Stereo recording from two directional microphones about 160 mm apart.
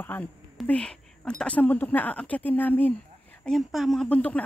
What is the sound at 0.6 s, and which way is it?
Whispering, 5° left (ahead or behind).